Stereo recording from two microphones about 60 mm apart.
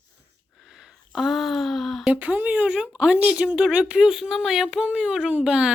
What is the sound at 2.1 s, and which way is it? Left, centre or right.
Speech, right.